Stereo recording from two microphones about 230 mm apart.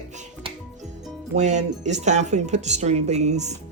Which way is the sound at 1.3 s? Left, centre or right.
Right.